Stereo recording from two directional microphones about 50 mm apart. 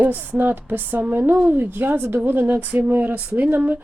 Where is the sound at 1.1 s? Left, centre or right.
Right.